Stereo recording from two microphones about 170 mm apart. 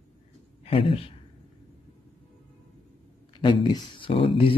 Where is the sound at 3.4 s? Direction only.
30° left (ahead or behind).